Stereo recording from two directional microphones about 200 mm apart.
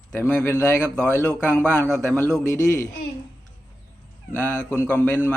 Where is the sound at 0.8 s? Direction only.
10° right (ahead or behind).